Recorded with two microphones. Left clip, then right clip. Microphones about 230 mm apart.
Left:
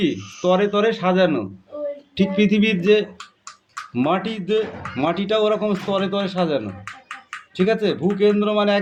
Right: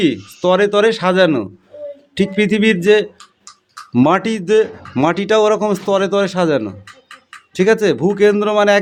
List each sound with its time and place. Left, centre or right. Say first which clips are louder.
0.0 s speech: right 5 dB; right